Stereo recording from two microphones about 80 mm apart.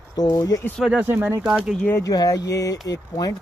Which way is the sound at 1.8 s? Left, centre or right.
Left.